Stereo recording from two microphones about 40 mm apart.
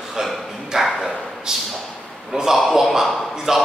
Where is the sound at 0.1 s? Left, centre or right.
Centre.